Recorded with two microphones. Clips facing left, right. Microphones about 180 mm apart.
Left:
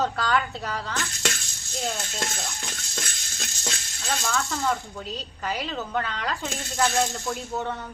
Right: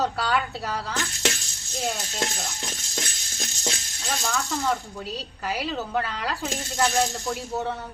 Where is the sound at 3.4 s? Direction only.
15° right (ahead or behind).